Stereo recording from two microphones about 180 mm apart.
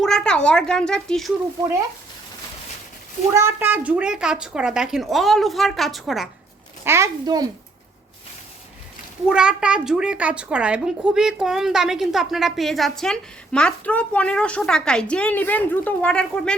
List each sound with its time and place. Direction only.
0.0 s speech: centre (ahead or behind)
3.3 s speech: 15° right (ahead or behind)
6.8 s a woman's voice: 15° right (ahead or behind)
9.3 s speech: 5° right (ahead or behind)